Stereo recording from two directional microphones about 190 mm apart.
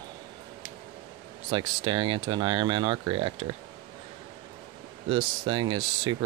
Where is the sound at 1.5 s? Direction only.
25° right (ahead or behind).